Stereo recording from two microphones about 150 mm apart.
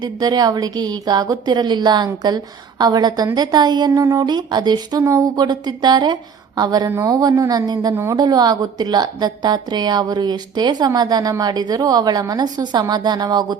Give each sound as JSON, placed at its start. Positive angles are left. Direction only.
{"t": 0.0, "sound": "a woman's voice", "side_deg": -25}